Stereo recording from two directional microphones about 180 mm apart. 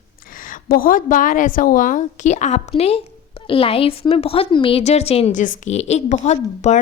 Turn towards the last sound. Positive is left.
turn(degrees=40)  # may be behind; listen again after turning